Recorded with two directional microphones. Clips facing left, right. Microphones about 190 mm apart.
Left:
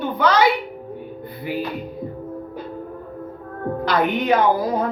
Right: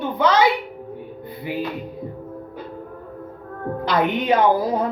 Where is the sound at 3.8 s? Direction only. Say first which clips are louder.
Even; 25° right (ahead or behind).